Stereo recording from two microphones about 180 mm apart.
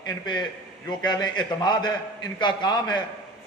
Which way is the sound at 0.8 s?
25° left (ahead or behind).